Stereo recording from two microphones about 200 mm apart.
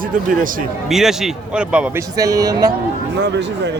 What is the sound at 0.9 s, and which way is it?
Speech, centre (ahead or behind).